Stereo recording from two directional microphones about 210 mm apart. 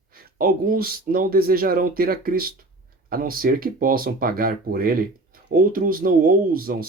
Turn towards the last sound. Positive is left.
turn(degrees=-45)  # may be behind; listen again after turning